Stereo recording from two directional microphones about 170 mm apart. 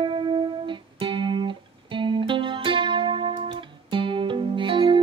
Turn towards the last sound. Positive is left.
turn(degrees=-30)  # may be behind; listen again after turning